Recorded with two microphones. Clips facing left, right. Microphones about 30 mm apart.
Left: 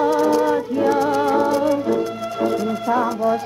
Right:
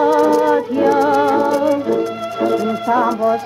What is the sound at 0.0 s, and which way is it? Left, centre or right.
A capella, centre.